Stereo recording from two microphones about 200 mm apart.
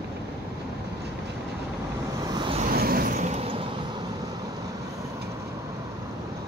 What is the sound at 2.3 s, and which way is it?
Vehicle, 25° right (ahead or behind).